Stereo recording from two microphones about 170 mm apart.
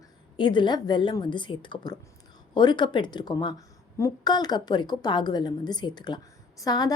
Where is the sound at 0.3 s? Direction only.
30° left (ahead or behind).